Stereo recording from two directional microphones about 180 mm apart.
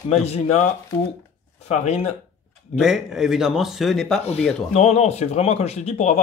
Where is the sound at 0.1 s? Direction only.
35° left (ahead or behind).